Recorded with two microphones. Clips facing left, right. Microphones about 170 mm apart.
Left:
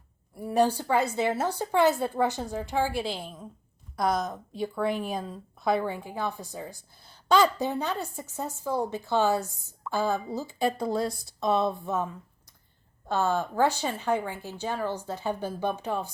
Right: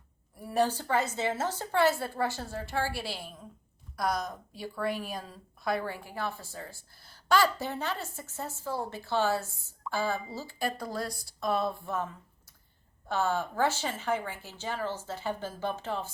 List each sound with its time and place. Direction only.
0.3 s a woman's voice: 15° left (ahead or behind)
4.0 s a woman's voice: centre (ahead or behind)
4.3 s a woman's voice: 25° left (ahead or behind)